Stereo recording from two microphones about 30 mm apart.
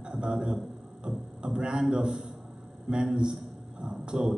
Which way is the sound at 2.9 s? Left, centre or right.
Right.